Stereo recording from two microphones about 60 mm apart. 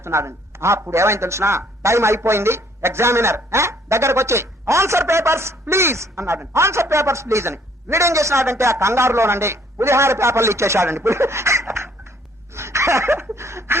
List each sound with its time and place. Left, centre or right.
0.0 s a man's voice: right
12.5 s dog: right